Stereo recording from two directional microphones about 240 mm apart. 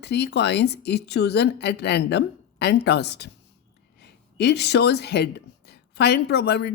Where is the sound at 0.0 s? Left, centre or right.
Left.